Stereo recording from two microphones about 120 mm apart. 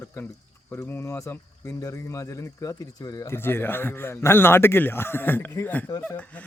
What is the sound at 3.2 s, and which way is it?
Speech, 20° left (ahead or behind).